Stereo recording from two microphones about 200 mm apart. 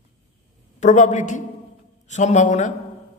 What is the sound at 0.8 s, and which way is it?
A man's voice, 40° left (ahead or behind).